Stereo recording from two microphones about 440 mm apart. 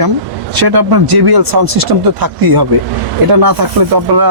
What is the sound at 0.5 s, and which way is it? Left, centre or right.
Speech, right.